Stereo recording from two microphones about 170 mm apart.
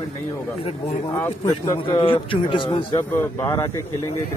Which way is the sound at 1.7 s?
30° left (ahead or behind).